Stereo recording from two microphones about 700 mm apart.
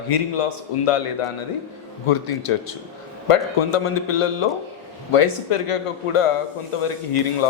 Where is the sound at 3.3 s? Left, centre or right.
Left.